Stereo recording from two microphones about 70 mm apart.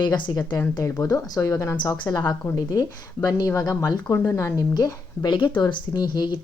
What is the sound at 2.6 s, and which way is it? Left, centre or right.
Speech, left.